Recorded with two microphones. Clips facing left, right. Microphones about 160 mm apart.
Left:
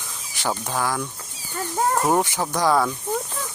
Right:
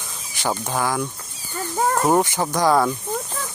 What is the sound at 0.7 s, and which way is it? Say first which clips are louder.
Speech: right 2 dB; 5° right (ahead or behind).